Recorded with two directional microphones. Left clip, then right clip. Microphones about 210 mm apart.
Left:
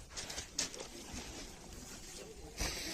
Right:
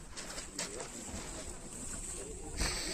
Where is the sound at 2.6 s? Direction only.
55° left (ahead or behind).